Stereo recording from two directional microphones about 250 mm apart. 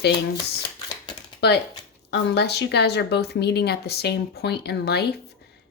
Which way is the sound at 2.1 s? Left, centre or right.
Left.